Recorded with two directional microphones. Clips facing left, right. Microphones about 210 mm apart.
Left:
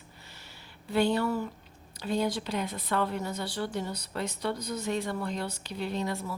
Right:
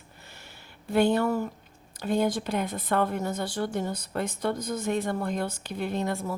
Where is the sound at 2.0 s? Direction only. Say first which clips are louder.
Right 4 dB; 50° right (ahead or behind).